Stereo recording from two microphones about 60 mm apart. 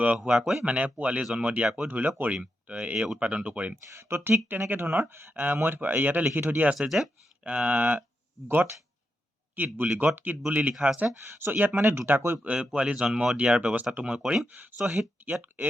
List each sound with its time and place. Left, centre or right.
0.0 s speech: right
0.3 s speech: centre
0.6 s speech: right
3.9 s speech: right
6.7 s speech: centre
7.4 s speech: right
8.4 s speech: right
11.3 s speech: right
11.5 s speech: right
12.4 s speech: centre
14.2 s speech: centre
14.4 s speech: right
14.8 s speech: centre